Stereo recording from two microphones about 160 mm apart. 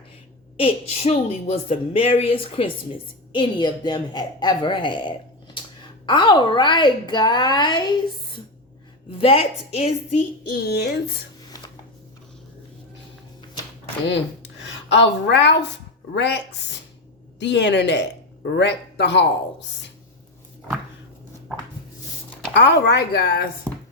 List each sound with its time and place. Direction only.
0.6 s a woman's voice: 40° left (ahead or behind)
9.0 s a woman's voice: 35° left (ahead or behind)
10.7 s a man's voice: 90° left
11.4 s a sound: 25° left (ahead or behind)
14.1 s a man's voice: 90° left
22.5 s a man's voice: 90° left